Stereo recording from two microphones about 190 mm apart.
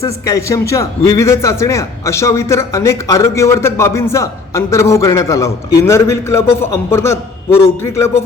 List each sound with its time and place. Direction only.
0.0 s a man's voice: 15° left (ahead or behind)